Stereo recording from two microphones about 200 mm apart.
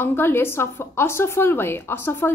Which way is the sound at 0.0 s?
10° left (ahead or behind).